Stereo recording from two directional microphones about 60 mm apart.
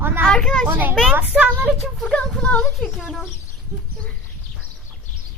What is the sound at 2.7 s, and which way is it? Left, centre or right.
Speech, centre.